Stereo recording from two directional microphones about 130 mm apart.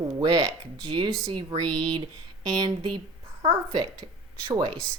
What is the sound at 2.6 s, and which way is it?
A woman's voice, 35° right (ahead or behind).